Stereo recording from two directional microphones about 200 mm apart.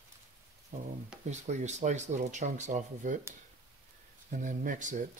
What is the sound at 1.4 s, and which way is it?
Speech, 35° right (ahead or behind).